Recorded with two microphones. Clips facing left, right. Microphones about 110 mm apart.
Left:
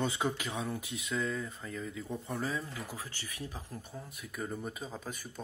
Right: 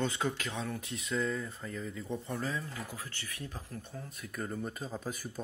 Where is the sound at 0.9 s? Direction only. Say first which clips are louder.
Right 5 dB; centre (ahead or behind).